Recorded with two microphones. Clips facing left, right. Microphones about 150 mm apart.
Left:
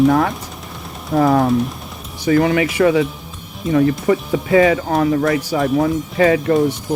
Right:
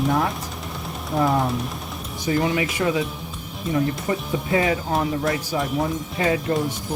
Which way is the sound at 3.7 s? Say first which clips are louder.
Left 9 dB; 90° left.